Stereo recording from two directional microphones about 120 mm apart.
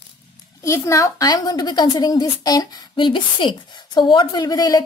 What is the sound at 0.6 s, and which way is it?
A child's voice, 25° left (ahead or behind).